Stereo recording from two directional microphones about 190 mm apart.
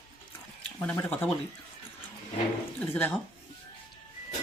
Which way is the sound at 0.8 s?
10° left (ahead or behind).